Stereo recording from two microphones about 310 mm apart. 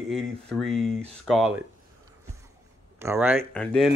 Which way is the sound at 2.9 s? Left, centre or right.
Centre.